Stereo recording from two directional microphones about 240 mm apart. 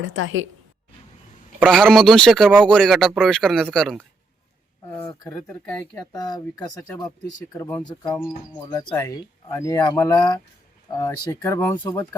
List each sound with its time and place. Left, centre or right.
0.0 s a woman's voice: right
1.5 s speech: centre
4.9 s speech: centre